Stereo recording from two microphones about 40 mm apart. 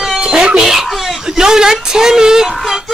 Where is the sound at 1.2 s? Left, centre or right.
Centre.